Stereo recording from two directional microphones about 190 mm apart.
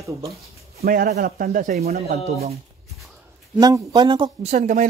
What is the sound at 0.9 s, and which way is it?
Speech, 50° right (ahead or behind).